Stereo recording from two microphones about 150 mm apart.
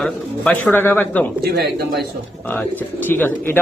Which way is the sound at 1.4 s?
90° right.